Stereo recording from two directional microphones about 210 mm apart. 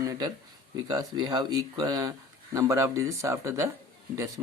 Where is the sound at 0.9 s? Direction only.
20° right (ahead or behind).